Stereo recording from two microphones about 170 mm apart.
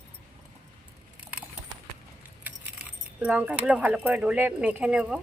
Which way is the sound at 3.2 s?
5° right (ahead or behind).